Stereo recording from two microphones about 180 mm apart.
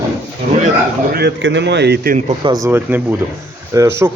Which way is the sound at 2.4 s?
20° right (ahead or behind).